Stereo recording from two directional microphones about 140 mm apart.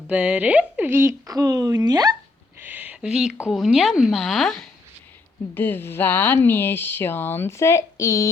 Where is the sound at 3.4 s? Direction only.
Centre (ahead or behind).